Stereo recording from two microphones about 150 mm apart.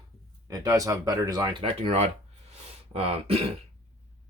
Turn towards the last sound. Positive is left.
turn(degrees=-40)  # may be behind; listen again after turning